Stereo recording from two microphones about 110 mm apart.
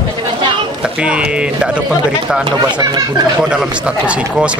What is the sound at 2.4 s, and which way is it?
Speech, 45° right (ahead or behind).